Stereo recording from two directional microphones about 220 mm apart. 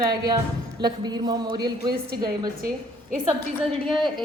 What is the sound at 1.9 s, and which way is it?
Speech, 45° right (ahead or behind).